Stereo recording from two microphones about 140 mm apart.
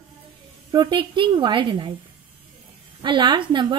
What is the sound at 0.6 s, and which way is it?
A woman's voice, 35° right (ahead or behind).